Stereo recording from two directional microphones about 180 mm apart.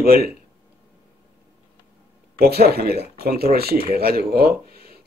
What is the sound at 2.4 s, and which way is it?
Speech, 60° right (ahead or behind).